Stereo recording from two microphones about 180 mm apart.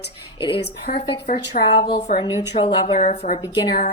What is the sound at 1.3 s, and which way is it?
Speech, 45° left (ahead or behind).